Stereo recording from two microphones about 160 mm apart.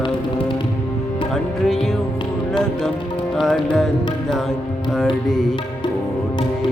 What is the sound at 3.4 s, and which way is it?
Music, centre (ahead or behind).